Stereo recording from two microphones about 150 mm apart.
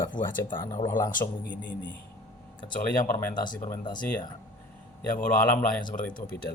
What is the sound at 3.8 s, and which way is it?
Speech, 30° left (ahead or behind).